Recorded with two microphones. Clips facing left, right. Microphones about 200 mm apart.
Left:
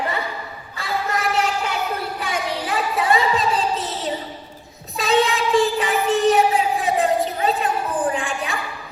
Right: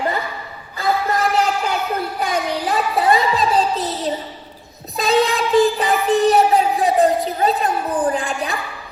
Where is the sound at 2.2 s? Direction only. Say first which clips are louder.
Right 4 dB; 40° right (ahead or behind).